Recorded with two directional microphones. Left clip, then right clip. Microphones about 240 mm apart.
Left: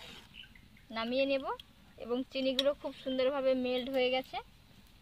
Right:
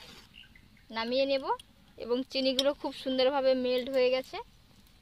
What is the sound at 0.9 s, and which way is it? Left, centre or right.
A woman's voice, right.